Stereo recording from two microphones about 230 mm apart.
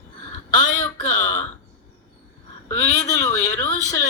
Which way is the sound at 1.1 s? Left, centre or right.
Centre.